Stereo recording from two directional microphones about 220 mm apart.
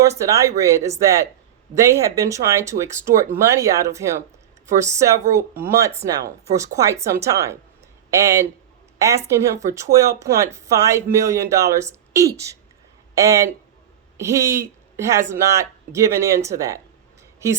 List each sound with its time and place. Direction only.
0.0 s speech: 15° right (ahead or behind)